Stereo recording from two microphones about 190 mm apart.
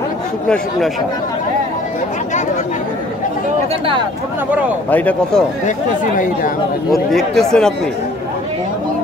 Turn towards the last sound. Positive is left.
turn(degrees=5)  # may be behind; listen again after turning